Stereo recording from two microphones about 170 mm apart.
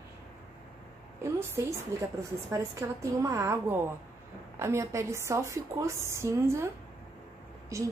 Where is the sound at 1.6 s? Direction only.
15° right (ahead or behind).